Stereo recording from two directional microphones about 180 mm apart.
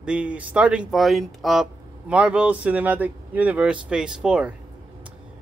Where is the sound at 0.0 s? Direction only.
5° right (ahead or behind).